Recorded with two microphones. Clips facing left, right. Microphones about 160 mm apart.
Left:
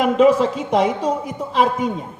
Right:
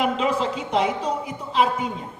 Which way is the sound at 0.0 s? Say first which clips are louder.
Left 8 dB; 45° left (ahead or behind).